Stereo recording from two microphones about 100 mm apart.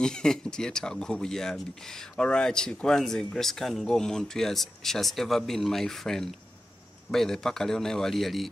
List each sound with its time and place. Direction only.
0.0 s speech: 5° left (ahead or behind)